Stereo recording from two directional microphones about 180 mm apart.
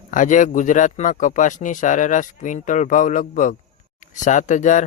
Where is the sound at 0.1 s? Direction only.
45° left (ahead or behind).